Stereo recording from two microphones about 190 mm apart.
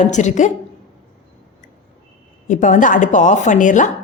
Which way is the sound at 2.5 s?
40° left (ahead or behind).